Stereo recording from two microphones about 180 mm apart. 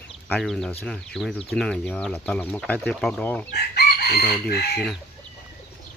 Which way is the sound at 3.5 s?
65° left (ahead or behind).